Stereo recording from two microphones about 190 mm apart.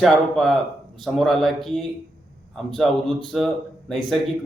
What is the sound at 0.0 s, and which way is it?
A man's voice, centre (ahead or behind).